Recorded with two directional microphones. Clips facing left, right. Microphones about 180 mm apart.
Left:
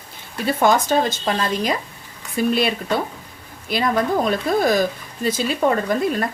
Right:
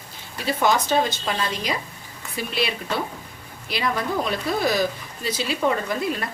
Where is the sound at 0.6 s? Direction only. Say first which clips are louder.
Left 3 dB; 50° left (ahead or behind).